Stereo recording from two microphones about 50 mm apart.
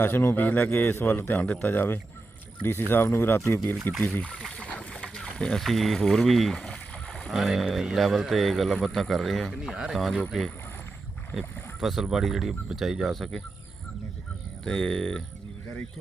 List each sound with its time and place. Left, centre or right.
0.0 s speech: left
0.3 s speech: left
0.9 s speech: left
1.3 s speech: left
4.0 s speech: left
4.5 s a sound: left; by 6.6 s centre
6.6 s rowboat: left
7.3 s speech: centre
9.6 s speech: centre
9.9 s speech: centre
14.6 s speech: centre